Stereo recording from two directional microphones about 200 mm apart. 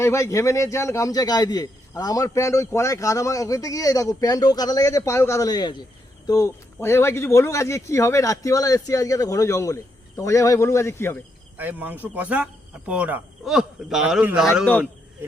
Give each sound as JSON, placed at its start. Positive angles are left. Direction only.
{"t": 0.0, "sound": "a man's voice", "side_deg": 15}
{"t": 11.5, "sound": "speech", "side_deg": -10}